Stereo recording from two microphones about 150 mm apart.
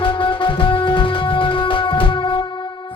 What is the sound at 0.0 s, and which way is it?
Music, 35° left (ahead or behind).